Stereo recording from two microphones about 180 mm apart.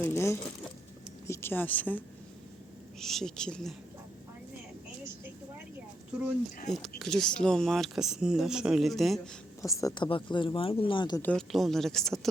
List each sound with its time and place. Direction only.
0.0 s speech: 15° left (ahead or behind)
3.0 s speech: centre (ahead or behind)
6.7 s speech: centre (ahead or behind)
9.6 s speech: 20° left (ahead or behind)
11.2 s speech: 5° left (ahead or behind)